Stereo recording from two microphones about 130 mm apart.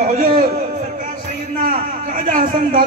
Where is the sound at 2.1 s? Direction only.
90° right.